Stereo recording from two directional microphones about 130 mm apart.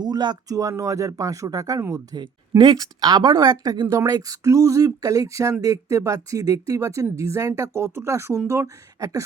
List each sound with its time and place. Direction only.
0.0 s speech: 35° right (ahead or behind)